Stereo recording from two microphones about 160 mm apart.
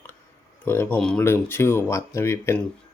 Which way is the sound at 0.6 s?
15° left (ahead or behind).